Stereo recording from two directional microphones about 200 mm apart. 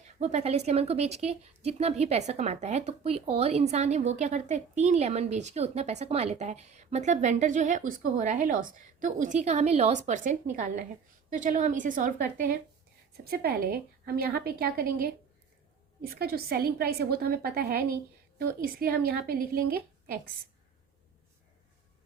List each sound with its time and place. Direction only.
0.2 s a woman's voice: 35° right (ahead or behind)